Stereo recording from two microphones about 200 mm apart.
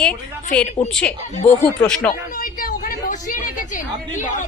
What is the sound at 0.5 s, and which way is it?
Speech, 5° left (ahead or behind).